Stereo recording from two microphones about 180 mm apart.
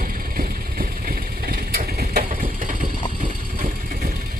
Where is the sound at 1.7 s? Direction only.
60° right (ahead or behind).